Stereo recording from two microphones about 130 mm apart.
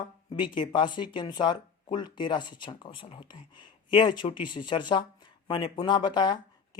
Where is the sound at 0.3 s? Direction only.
35° left (ahead or behind).